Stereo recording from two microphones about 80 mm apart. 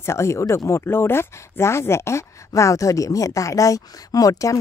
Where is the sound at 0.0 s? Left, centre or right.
Left.